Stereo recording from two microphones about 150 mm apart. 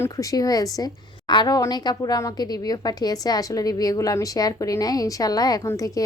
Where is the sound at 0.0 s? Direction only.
20° left (ahead or behind).